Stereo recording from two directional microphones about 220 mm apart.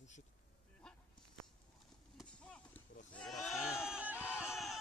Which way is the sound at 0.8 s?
5° left (ahead or behind).